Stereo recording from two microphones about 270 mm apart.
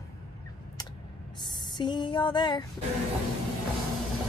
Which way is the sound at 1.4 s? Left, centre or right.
Centre.